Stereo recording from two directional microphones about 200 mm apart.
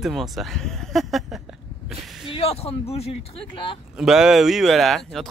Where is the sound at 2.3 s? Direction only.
30° left (ahead or behind).